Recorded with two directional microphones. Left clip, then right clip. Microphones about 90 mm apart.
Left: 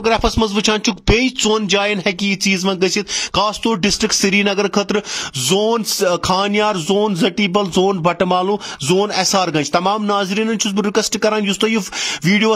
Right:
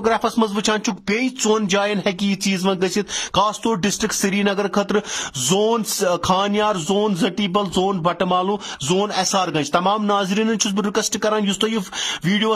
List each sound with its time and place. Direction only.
0.0 s speech: 35° left (ahead or behind)
1.2 s a man's voice: 20° left (ahead or behind); by 12.5 s 35° left (ahead or behind)